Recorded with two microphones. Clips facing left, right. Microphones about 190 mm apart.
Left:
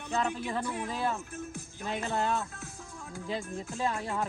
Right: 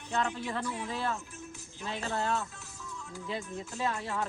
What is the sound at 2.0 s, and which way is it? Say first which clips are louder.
Speech: left 1 dB; 15° left (ahead or behind).